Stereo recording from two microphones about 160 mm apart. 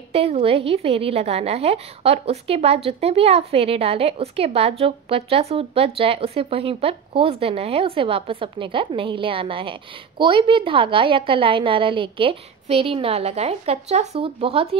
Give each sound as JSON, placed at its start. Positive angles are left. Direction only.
{"t": 0.1, "sound": "a woman's voice", "side_deg": -40}